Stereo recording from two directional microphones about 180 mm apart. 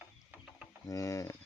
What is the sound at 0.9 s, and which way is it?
Speech, 20° left (ahead or behind).